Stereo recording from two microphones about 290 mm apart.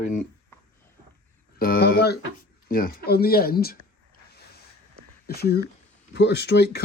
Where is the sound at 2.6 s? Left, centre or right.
Left.